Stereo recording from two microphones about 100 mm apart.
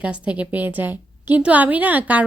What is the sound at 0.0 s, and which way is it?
A woman's voice, 15° right (ahead or behind).